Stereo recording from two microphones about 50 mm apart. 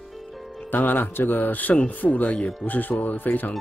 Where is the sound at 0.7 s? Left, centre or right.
Left.